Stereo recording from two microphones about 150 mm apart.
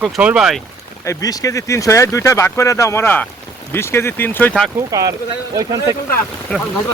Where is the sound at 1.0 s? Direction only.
20° left (ahead or behind).